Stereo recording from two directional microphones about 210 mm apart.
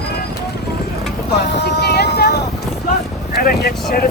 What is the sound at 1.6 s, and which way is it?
Vehicle, 50° left (ahead or behind).